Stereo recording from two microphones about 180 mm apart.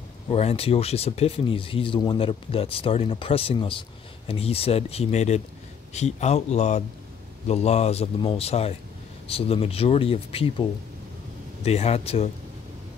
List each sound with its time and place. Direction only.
0.3 s speech: 35° left (ahead or behind)
11.6 s speech: 35° left (ahead or behind)